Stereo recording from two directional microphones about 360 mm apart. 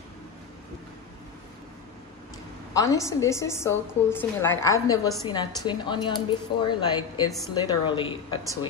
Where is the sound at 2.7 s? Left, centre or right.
Centre.